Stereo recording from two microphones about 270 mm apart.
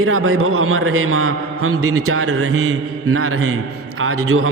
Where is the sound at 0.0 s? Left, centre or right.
Right.